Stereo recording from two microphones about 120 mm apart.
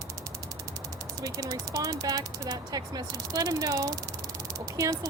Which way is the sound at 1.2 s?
30° right (ahead or behind).